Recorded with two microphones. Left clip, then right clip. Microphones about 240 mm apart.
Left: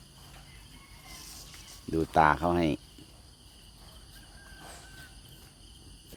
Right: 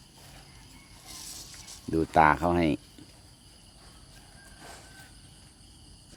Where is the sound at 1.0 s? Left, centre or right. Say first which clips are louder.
Right 4 dB; right.